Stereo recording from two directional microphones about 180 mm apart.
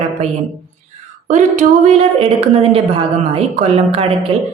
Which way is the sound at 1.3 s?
40° right (ahead or behind).